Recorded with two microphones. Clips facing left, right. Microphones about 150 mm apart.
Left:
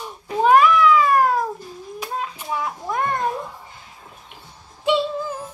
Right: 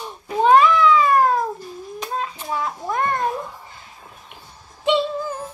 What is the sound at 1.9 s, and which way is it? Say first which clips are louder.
Hands: right 1 dB; 10° left (ahead or behind).